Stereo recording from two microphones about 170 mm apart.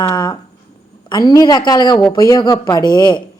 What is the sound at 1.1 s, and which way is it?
Speech, 25° left (ahead or behind).